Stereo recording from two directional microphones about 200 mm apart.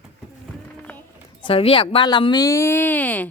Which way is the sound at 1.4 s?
30° left (ahead or behind).